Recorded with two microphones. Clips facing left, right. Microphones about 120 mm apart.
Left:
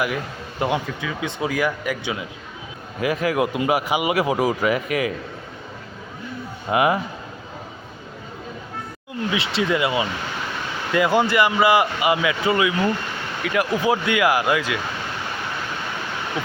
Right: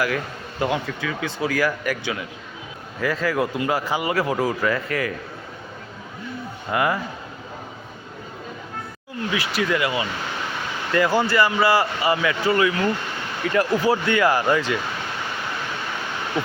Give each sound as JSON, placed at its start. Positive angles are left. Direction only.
{"t": 0.6, "sound": "speech", "side_deg": 20}
{"t": 6.7, "sound": "speech", "side_deg": 20}
{"t": 9.3, "sound": "speech", "side_deg": 25}